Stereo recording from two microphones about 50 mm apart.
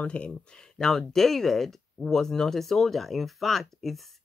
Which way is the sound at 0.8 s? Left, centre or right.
Centre.